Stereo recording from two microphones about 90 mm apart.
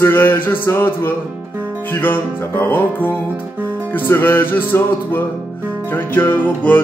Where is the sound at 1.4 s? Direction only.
25° right (ahead or behind).